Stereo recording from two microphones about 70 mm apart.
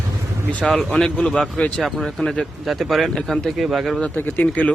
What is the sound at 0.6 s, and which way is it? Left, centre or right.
Speech, centre.